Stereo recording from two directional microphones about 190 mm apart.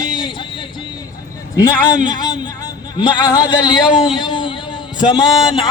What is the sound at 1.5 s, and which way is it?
A man's voice, 20° left (ahead or behind).